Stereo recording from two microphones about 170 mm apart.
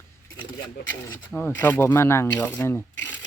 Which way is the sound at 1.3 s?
10° left (ahead or behind).